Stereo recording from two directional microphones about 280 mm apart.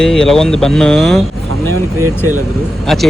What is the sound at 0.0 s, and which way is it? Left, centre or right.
Speech, centre.